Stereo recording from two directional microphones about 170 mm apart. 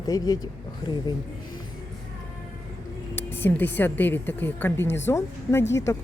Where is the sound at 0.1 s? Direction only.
20° left (ahead or behind).